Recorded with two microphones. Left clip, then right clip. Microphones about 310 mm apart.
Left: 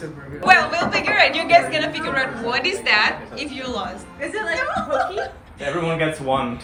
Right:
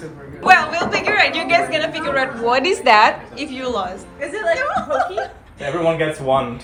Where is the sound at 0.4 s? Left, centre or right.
Centre.